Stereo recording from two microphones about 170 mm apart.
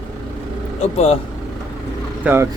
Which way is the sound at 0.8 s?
35° left (ahead or behind).